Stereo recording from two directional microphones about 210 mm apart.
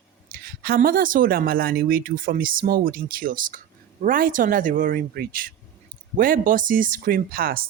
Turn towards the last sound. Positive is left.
turn(degrees=-45)  # may be behind; listen again after turning